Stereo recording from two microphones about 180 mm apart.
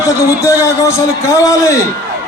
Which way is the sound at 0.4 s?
15° left (ahead or behind).